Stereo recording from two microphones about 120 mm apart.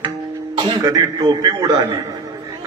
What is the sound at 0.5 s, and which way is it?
A man's voice, 35° right (ahead or behind).